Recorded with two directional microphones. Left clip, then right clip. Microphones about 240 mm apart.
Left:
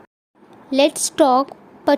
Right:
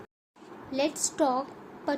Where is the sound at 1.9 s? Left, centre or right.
Left.